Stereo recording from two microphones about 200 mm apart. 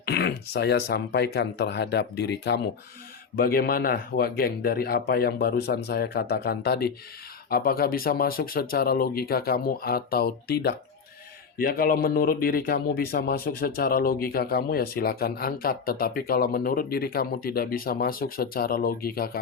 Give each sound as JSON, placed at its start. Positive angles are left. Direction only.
{"t": 0.0, "sound": "speech", "side_deg": 55}